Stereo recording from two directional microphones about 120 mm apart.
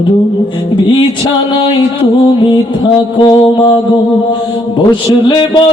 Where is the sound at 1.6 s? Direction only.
45° left (ahead or behind).